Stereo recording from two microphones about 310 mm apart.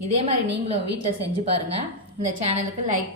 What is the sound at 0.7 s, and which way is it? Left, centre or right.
A woman's voice, right.